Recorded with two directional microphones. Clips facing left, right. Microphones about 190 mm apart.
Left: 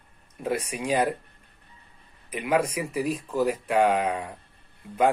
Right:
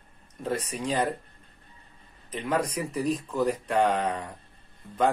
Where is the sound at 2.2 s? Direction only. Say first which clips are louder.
Left 3 dB; 10° left (ahead or behind).